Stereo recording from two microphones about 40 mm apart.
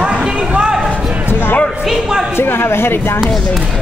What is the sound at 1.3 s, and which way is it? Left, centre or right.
Basketball bounce, left.